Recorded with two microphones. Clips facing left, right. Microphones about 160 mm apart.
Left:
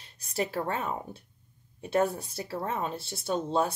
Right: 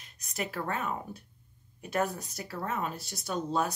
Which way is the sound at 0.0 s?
30° left (ahead or behind).